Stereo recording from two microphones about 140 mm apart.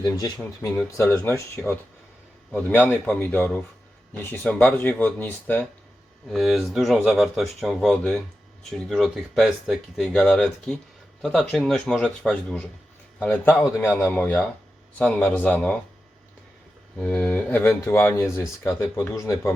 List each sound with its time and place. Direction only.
0.9 s speech: 20° left (ahead or behind)
1.6 s speech: 5° left (ahead or behind)
6.2 s a man's voice: centre (ahead or behind)
17.0 s speech: 10° left (ahead or behind)